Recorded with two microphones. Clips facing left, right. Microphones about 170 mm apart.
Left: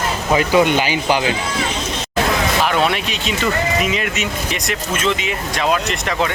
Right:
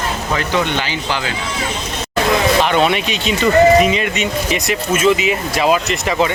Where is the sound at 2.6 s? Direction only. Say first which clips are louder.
Right 3 dB; centre (ahead or behind).